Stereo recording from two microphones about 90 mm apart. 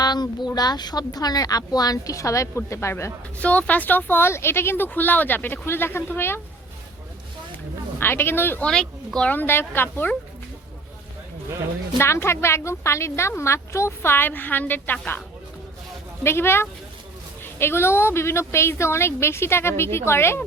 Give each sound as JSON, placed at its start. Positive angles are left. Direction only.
{"t": 0.0, "sound": "speech", "side_deg": 50}
{"t": 3.4, "sound": "a woman's voice", "side_deg": 15}
{"t": 7.9, "sound": "a woman's voice", "side_deg": 25}
{"t": 8.6, "sound": "speech", "side_deg": 5}
{"t": 9.3, "sound": "a woman's voice", "side_deg": 25}
{"t": 11.9, "sound": "a woman's voice", "side_deg": 30}
{"t": 16.2, "sound": "a woman's voice", "side_deg": 25}